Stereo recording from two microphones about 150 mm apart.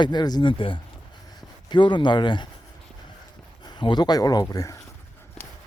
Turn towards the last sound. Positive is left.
turn(degrees=20)  # may be behind; listen again after turning